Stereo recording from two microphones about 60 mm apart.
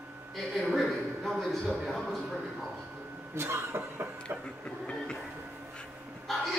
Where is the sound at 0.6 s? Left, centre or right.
Centre.